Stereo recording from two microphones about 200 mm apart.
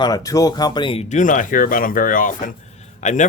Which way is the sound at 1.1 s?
40° left (ahead or behind).